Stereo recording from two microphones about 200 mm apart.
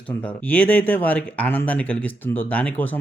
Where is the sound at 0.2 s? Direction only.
10° left (ahead or behind).